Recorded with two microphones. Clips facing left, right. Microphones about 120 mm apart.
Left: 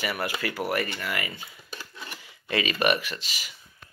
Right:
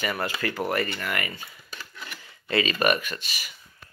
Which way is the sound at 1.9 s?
30° left (ahead or behind).